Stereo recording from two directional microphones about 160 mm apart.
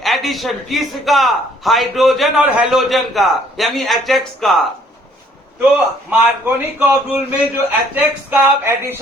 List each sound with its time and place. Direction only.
0.0 s a man's voice: centre (ahead or behind)
5.7 s a man's voice: 10° right (ahead or behind)